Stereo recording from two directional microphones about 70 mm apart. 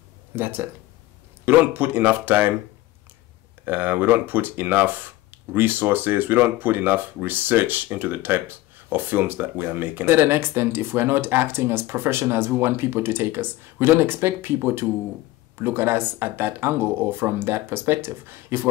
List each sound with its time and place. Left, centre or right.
0.4 s speech: right
3.6 s speech: right